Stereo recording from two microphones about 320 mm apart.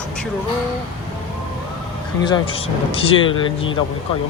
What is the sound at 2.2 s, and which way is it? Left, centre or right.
Speech, centre.